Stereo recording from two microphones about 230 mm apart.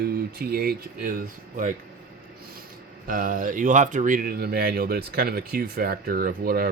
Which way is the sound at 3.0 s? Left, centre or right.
Right.